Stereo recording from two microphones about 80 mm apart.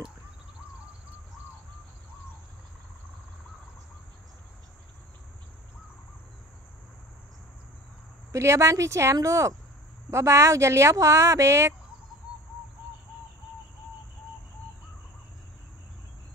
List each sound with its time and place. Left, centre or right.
8.3 s speech: right